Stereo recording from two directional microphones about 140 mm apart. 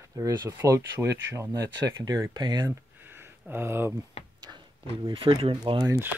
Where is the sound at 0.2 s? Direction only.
30° right (ahead or behind).